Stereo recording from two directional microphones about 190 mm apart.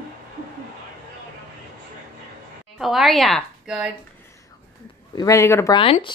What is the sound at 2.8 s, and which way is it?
A woman's voice, centre (ahead or behind).